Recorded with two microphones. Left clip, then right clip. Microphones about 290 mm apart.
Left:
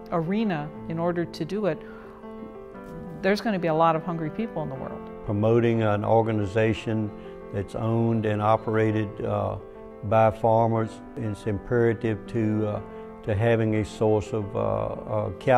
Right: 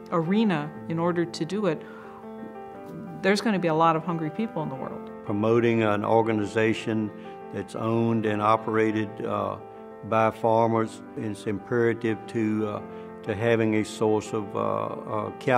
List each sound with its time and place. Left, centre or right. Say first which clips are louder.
0.1 s speech: right 2 dB; left
3.2 s speech: right 1 dB; left
5.4 s speech: even; left